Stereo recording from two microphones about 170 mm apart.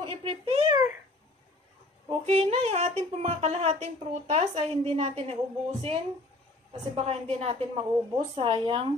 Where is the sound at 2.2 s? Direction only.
40° right (ahead or behind).